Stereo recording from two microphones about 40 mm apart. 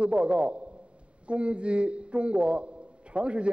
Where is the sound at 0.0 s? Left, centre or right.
Right.